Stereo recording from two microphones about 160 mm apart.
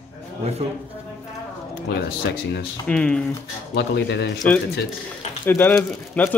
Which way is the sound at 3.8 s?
90° left.